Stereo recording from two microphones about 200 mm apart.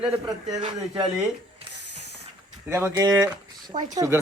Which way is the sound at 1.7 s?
60° left (ahead or behind).